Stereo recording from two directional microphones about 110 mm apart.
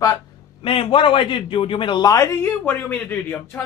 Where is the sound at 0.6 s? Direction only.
55° left (ahead or behind).